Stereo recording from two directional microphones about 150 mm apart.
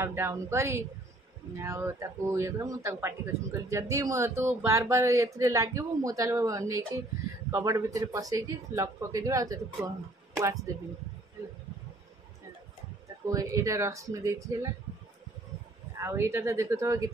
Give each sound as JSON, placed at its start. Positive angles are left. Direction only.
{"t": 0.0, "sound": "a woman's voice", "side_deg": -15}
{"t": 13.2, "sound": "speech", "side_deg": -20}
{"t": 16.0, "sound": "speech", "side_deg": -20}